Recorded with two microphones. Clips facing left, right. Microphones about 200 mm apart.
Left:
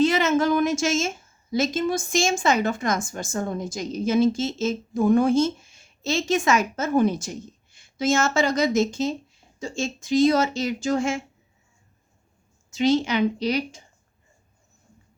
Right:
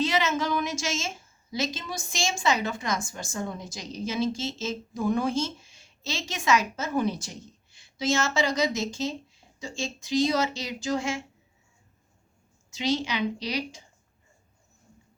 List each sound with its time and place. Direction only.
0.0 s a woman's voice: 50° left (ahead or behind)
12.7 s a woman's voice: 50° left (ahead or behind)